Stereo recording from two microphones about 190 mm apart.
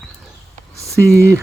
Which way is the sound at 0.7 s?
15° right (ahead or behind).